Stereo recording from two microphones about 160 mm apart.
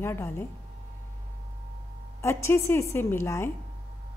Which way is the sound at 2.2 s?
15° left (ahead or behind).